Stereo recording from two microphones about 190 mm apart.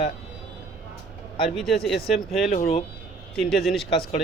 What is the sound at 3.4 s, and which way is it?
Speech, centre (ahead or behind).